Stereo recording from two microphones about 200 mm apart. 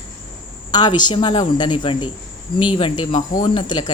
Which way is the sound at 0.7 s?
20° left (ahead or behind).